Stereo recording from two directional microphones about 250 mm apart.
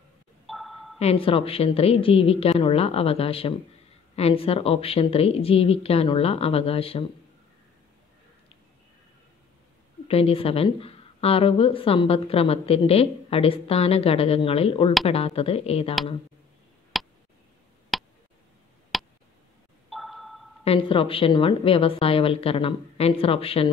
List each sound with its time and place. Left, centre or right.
0.5 s a sound: centre
0.9 s a woman's voice: left
10.0 s a woman's voice: left
16.9 s tick: centre
17.9 s a sound: centre
20.6 s a woman's voice: left